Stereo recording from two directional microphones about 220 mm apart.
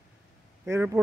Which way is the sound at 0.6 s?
10° right (ahead or behind).